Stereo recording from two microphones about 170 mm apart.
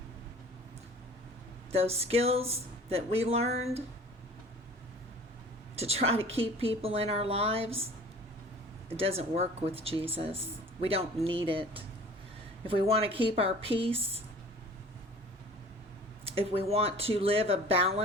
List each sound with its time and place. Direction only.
1.7 s speech: 35° right (ahead or behind)
5.7 s speech: 35° right (ahead or behind)
9.0 s speech: 35° right (ahead or behind)
16.2 s speech: 35° right (ahead or behind)